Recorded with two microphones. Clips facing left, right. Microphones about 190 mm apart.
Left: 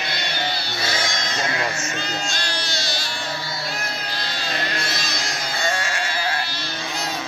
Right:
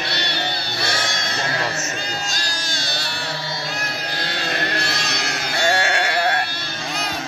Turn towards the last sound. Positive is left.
turn(degrees=-65)  # may be behind; listen again after turning